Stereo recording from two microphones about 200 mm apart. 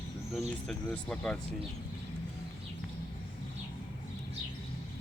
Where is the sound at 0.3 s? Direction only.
5° left (ahead or behind).